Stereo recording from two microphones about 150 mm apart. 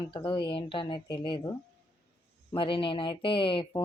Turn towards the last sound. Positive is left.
turn(degrees=35)  # may be behind; listen again after turning